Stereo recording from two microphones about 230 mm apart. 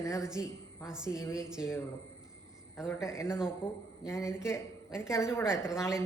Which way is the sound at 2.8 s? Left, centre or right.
Centre.